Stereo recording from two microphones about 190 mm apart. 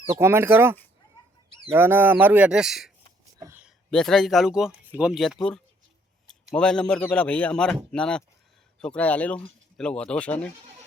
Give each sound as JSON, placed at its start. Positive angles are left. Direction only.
{"t": 0.1, "sound": "speech", "side_deg": -15}
{"t": 3.3, "sound": "a sound", "side_deg": -15}
{"t": 3.9, "sound": "speech", "side_deg": 0}